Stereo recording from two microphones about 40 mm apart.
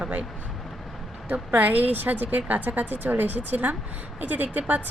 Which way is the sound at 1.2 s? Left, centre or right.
Right.